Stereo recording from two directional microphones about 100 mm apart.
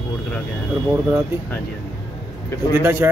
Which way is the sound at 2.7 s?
25° right (ahead or behind).